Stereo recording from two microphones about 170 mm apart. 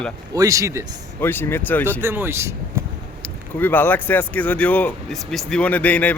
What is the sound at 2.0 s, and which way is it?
Speech, 15° right (ahead or behind).